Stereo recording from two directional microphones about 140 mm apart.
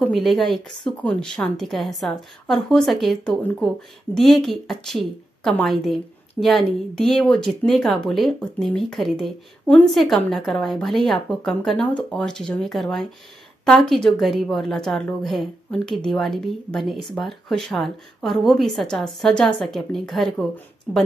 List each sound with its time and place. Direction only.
0.1 s a woman's voice: centre (ahead or behind)